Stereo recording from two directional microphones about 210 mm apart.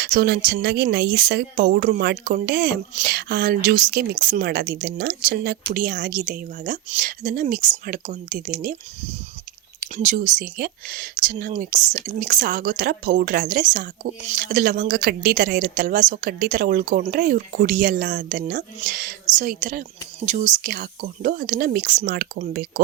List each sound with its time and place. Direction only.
0.0 s speech: 45° right (ahead or behind)